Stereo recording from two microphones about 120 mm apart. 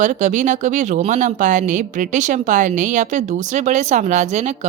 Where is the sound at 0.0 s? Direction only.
90° right.